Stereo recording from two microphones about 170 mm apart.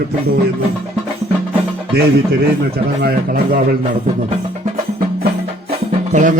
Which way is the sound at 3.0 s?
60° right (ahead or behind).